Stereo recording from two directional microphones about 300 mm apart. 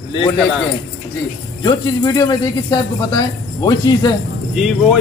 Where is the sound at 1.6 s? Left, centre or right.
Centre.